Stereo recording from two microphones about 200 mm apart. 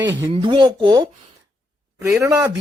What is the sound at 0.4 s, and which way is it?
A man's voice, 25° right (ahead or behind).